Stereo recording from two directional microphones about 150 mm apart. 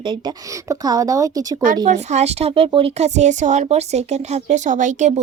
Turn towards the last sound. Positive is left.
turn(degrees=-50)  # may be behind; listen again after turning